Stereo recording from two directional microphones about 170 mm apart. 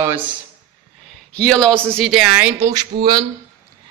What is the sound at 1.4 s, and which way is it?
Speech, 5° left (ahead or behind).